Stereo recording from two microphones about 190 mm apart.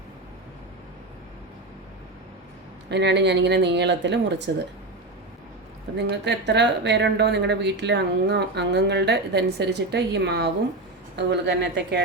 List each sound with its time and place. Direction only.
2.9 s speech: 65° right (ahead or behind)
6.0 s speech: 65° right (ahead or behind)